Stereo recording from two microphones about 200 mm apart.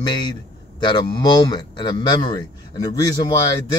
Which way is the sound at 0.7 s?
20° left (ahead or behind).